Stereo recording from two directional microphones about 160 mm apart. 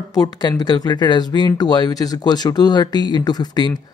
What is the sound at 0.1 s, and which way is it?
Speech, 25° left (ahead or behind).